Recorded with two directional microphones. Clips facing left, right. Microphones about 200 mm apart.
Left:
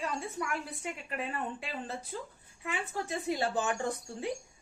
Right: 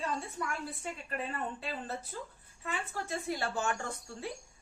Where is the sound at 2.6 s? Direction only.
15° left (ahead or behind).